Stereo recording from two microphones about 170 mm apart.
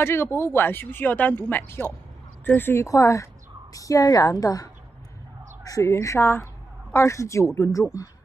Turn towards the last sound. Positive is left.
turn(degrees=15)  # may be behind; listen again after turning